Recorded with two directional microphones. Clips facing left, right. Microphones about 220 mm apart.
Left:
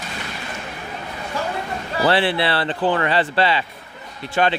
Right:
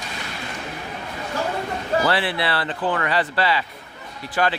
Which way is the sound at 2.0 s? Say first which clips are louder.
Left 4 dB; 25° left (ahead or behind).